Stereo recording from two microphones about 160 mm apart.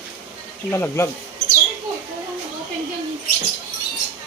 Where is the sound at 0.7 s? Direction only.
15° left (ahead or behind).